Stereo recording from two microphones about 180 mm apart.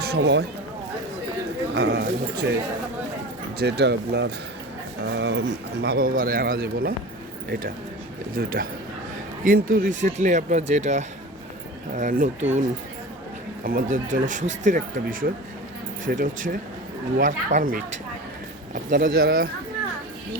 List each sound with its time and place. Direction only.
0.0 s speech: 70° right (ahead or behind)
1.7 s speech: 65° right (ahead or behind)
3.6 s speech: 70° right (ahead or behind)
5.0 s speech: 80° right; by 6.9 s 60° right (ahead or behind)
8.4 s speech: 55° right (ahead or behind)
13.7 s speech: 50° right (ahead or behind)
18.9 s speech: 55° right (ahead or behind)